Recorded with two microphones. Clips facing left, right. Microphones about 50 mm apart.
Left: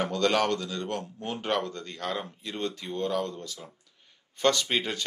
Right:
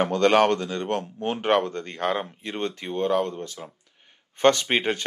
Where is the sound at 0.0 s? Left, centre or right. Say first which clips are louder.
Right 6 dB; right.